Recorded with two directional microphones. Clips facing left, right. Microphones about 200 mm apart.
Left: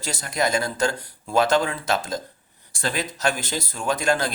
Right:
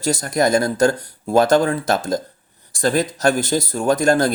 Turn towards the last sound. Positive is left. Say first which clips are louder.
# right 7 dB
turn(degrees=-40)  # may be behind; listen again after turning